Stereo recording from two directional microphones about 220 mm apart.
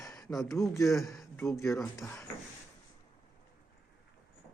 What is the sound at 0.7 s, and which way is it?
Speech, 15° left (ahead or behind).